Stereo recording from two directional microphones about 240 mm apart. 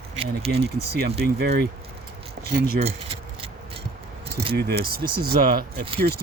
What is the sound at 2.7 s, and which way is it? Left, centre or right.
Keys jangling, right.